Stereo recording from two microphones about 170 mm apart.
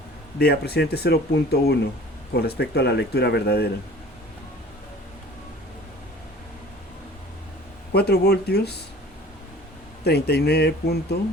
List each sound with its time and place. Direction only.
0.3 s speech: 70° left (ahead or behind)
7.9 s speech: 70° left (ahead or behind)
10.0 s speech: 75° left (ahead or behind)